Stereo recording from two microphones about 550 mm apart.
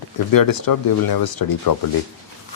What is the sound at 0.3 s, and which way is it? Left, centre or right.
Speech, left.